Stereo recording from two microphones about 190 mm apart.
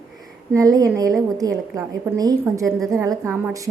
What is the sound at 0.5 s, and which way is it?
A woman's voice, 20° right (ahead or behind).